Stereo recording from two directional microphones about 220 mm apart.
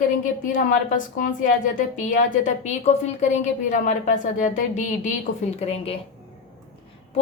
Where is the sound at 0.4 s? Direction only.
35° left (ahead or behind).